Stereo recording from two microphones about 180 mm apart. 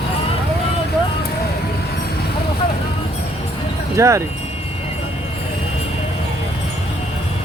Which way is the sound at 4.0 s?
15° right (ahead or behind).